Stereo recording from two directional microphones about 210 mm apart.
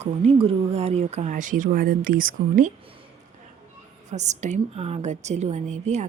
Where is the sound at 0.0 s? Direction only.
30° right (ahead or behind).